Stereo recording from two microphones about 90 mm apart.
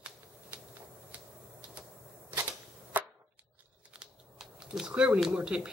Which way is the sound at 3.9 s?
5° right (ahead or behind).